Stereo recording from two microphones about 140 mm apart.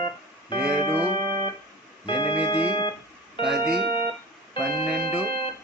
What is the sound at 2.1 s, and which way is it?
Organ, 35° left (ahead or behind).